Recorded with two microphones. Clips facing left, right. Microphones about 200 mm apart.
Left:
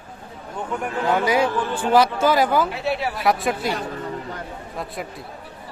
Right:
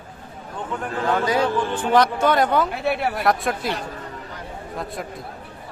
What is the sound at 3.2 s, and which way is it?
A man's voice, centre (ahead or behind).